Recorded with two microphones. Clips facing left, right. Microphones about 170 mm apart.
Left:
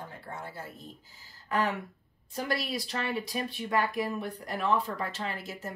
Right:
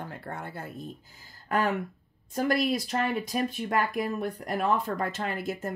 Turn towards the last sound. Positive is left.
turn(degrees=-55)  # may be behind; listen again after turning